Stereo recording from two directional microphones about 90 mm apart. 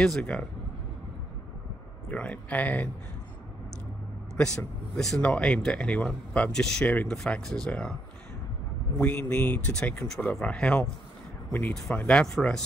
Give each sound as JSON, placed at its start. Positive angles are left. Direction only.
{"t": 0.0, "sound": "speech", "side_deg": 5}
{"t": 2.0, "sound": "speech", "side_deg": 15}
{"t": 4.4, "sound": "speech", "side_deg": 10}
{"t": 8.9, "sound": "speech", "side_deg": 20}
{"t": 12.0, "sound": "speech", "side_deg": 10}